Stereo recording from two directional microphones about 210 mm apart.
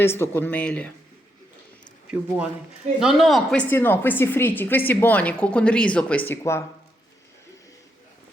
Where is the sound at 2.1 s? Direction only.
10° right (ahead or behind); by 6.6 s 15° left (ahead or behind).